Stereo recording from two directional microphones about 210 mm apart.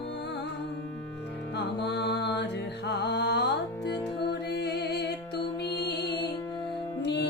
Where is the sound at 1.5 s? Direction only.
50° left (ahead or behind).